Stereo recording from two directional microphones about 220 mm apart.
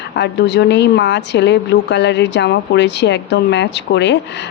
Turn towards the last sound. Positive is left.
turn(degrees=50)  # may be behind; listen again after turning